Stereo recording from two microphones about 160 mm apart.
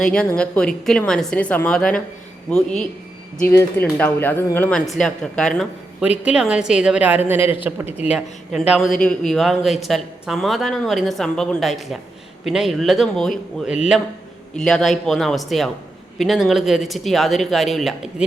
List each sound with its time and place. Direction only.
0.1 s a woman's voice: 5° left (ahead or behind)
3.4 s a woman's voice: 15° left (ahead or behind); by 7.3 s 10° right (ahead or behind)
7.9 s speech: 40° left (ahead or behind)
8.1 s speech: 5° right (ahead or behind)
14.5 s speech: 5° left (ahead or behind)